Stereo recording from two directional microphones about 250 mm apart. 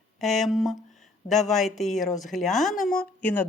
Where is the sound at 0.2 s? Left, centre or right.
Centre.